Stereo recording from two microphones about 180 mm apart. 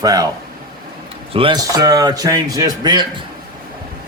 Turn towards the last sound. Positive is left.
turn(degrees=-25)  # may be behind; listen again after turning